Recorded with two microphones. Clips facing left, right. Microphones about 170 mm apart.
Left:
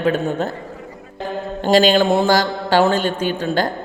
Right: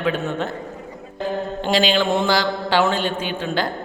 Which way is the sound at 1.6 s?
45° left (ahead or behind).